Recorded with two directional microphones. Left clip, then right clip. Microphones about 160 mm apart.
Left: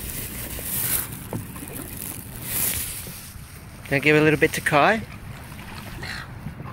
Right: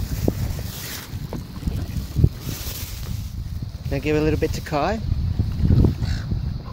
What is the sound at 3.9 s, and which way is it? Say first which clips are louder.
Speech: left 4 dB; centre (ahead or behind).